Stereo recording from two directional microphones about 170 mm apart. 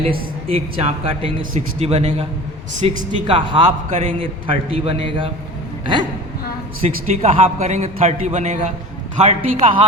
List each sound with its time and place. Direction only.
0.0 s a man's voice: 35° right (ahead or behind)
3.8 s a man's voice: 45° right (ahead or behind)
4.2 s a man's voice: 30° right (ahead or behind)
6.8 s a man's voice: 40° right (ahead or behind)